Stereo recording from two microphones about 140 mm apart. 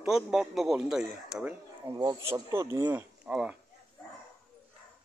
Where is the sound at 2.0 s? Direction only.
25° right (ahead or behind); by 3.6 s 5° right (ahead or behind).